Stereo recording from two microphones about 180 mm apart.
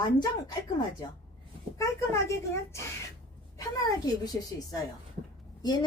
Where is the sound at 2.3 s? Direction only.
15° left (ahead or behind).